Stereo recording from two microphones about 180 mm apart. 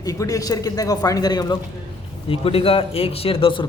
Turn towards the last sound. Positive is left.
turn(degrees=30)  # may be behind; listen again after turning